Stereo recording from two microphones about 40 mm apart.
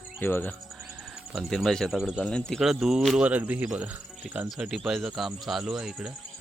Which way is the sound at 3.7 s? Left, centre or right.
Right.